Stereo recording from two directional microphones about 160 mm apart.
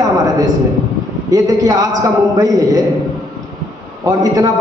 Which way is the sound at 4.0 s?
20° right (ahead or behind).